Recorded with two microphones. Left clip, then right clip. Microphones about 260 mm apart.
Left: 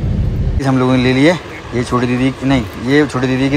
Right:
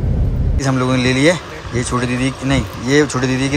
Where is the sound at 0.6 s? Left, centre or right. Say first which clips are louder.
Left 3 dB; centre.